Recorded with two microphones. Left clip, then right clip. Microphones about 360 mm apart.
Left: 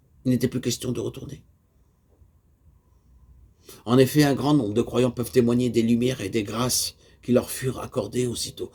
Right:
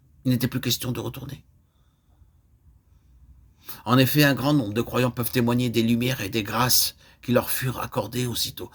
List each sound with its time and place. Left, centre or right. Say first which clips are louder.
0.2 s a man's voice: left 2 dB; right
3.6 s a man's voice: left 2 dB; right